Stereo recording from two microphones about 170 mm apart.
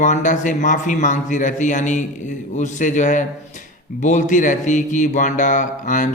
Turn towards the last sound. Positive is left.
turn(degrees=50)  # may be behind; listen again after turning